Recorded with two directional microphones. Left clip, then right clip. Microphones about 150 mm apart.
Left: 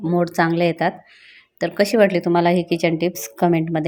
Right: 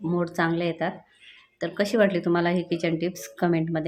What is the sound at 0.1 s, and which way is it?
A woman's voice, 35° left (ahead or behind).